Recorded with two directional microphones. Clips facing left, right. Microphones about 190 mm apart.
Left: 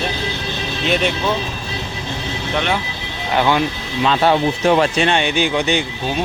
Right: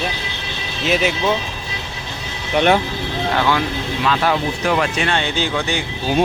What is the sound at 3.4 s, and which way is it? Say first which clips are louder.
Speech: left 4 dB; 20° left (ahead or behind).